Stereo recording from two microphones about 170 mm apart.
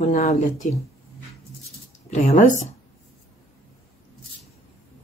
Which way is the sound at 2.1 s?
50° left (ahead or behind).